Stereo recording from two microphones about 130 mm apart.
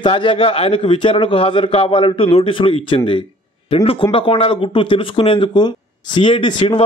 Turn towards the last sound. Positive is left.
turn(degrees=40)  # may be behind; listen again after turning